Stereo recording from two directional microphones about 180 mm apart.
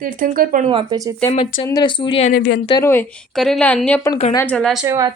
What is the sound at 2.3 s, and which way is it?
Speech, 60° left (ahead or behind).